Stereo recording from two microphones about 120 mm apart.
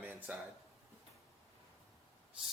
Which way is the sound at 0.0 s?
15° right (ahead or behind).